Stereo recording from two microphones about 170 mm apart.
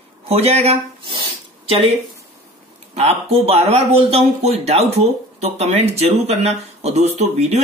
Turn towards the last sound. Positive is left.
turn(degrees=-40)  # may be behind; listen again after turning